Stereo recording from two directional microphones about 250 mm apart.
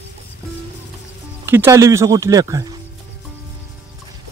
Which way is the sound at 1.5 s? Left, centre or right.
Centre.